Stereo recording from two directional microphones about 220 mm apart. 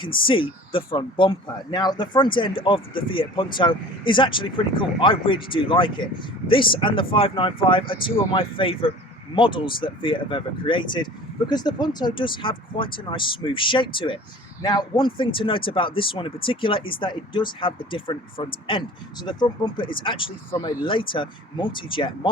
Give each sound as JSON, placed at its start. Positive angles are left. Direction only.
{"t": 0.0, "sound": "speech", "side_deg": 20}